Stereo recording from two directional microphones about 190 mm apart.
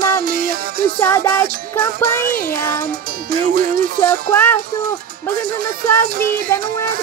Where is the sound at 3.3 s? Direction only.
50° right (ahead or behind).